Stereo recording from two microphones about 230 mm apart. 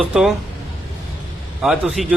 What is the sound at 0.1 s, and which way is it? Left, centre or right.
Speech, centre.